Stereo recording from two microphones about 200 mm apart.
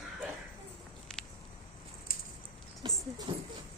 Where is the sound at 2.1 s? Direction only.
45° left (ahead or behind).